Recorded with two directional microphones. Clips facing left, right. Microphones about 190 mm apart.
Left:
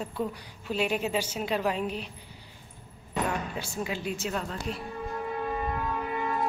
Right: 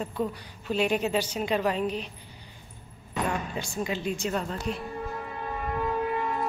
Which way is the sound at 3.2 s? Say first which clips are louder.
Right 1 dB; 5° left (ahead or behind).